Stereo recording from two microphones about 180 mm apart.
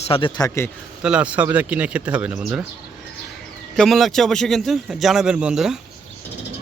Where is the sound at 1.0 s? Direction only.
5° right (ahead or behind).